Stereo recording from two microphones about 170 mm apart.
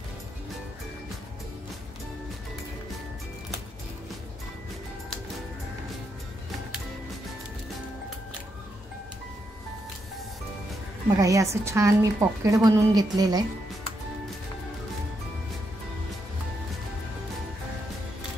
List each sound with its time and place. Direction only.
11.1 s a woman's voice: 20° right (ahead or behind)